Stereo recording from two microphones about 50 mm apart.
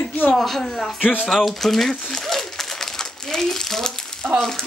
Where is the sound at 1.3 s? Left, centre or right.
Centre.